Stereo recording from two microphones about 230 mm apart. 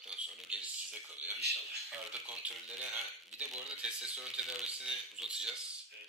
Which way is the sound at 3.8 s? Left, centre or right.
Centre.